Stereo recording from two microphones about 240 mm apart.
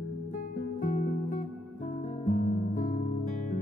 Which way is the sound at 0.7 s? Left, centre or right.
Left.